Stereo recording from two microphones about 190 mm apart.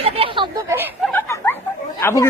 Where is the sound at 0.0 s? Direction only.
30° right (ahead or behind).